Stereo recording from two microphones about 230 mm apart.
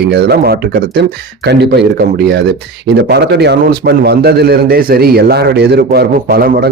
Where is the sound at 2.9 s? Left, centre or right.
Right.